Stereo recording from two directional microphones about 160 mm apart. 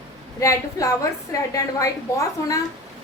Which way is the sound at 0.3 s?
20° left (ahead or behind).